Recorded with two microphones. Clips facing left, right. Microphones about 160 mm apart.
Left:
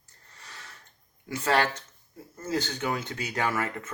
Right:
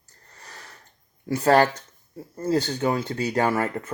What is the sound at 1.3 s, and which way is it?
Speech, 40° right (ahead or behind).